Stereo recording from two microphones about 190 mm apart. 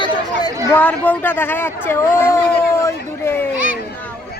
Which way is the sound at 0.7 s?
10° left (ahead or behind).